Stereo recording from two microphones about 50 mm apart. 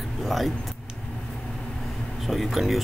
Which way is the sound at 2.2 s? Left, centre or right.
Centre.